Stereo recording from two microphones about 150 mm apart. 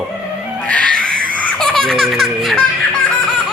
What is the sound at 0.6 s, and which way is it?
Cat, 10° left (ahead or behind).